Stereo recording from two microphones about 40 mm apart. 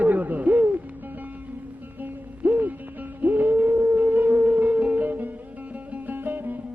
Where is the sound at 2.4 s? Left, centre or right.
Right.